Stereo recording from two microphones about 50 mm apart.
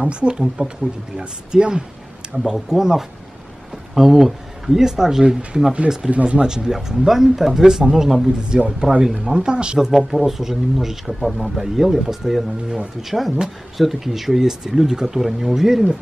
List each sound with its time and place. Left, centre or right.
0.0 s speech: right
6.0 s speech: right
9.8 s speech: centre